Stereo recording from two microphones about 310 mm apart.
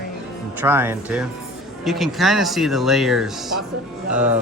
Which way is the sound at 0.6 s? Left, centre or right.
Centre.